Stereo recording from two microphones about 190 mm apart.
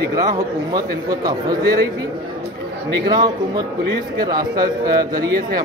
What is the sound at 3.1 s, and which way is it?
A man's voice, 20° right (ahead or behind).